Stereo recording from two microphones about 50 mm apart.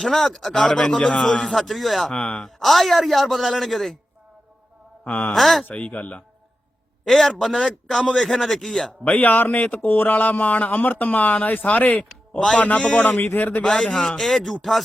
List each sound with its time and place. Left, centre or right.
0.0 s speech: centre
0.5 s a man's voice: centre
1.5 s speech: centre
2.1 s speech: centre
2.6 s speech: centre
5.0 s speech: left
5.3 s speech: centre
5.6 s speech: left
7.0 s a man's voice: centre
8.9 s speech: left
14.2 s speech: centre